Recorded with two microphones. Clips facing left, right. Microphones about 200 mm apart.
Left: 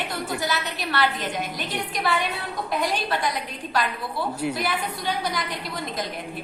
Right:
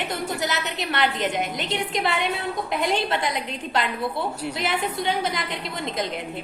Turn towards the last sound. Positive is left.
turn(degrees=-25)  # may be behind; listen again after turning